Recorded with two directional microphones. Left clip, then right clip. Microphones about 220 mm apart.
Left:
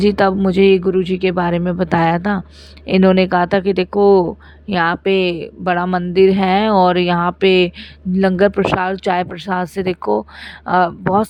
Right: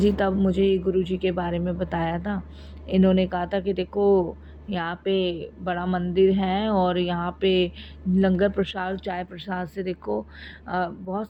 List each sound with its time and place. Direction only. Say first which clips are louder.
0.0 s speech: left 8 dB; 50° left (ahead or behind)